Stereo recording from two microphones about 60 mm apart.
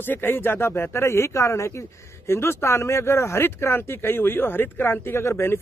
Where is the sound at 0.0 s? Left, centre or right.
Left.